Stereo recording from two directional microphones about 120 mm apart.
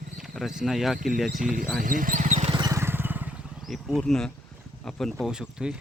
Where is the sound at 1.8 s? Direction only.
90° right.